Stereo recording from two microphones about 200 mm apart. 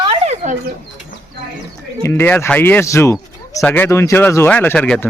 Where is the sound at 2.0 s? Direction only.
10° left (ahead or behind).